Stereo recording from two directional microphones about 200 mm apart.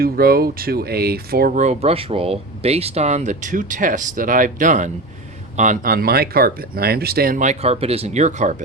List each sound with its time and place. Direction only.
0.0 s speech: 50° right (ahead or behind)